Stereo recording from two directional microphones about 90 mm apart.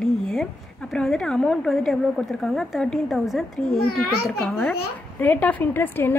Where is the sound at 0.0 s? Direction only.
5° left (ahead or behind).